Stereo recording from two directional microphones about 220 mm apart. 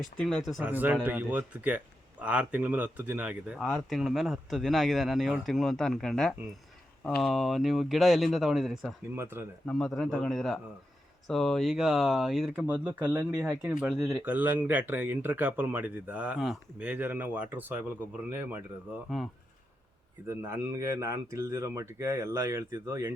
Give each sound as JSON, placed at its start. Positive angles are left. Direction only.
{"t": 0.0, "sound": "speech", "side_deg": 5}
{"t": 9.6, "sound": "speech", "side_deg": 5}
{"t": 20.2, "sound": "speech", "side_deg": -10}